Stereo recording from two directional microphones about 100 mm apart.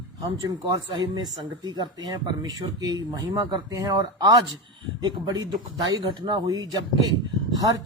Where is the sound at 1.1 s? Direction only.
45° right (ahead or behind).